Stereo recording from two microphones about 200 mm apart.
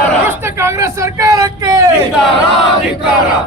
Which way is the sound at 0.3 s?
15° right (ahead or behind).